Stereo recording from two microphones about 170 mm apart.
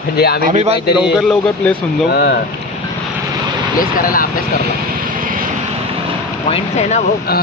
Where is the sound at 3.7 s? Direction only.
55° left (ahead or behind).